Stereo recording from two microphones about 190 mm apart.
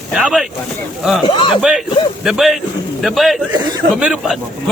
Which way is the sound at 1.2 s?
25° left (ahead or behind).